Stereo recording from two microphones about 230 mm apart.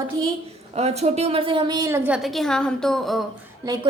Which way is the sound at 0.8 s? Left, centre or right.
Right.